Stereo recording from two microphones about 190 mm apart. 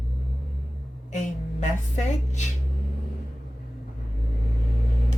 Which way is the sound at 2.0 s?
40° left (ahead or behind).